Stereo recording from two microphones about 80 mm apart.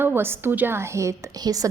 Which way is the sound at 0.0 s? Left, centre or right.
Right.